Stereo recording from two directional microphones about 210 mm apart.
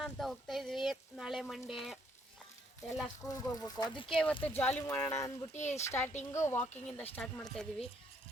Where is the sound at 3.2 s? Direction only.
Centre (ahead or behind).